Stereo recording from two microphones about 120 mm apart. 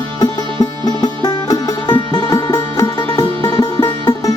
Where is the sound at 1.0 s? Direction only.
35° left (ahead or behind).